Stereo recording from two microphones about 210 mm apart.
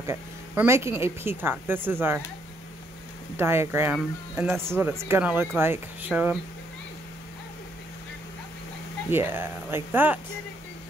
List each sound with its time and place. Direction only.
0.0 s speech: 10° right (ahead or behind)
3.3 s speech: 10° right (ahead or behind)
9.1 s speech: 10° right (ahead or behind)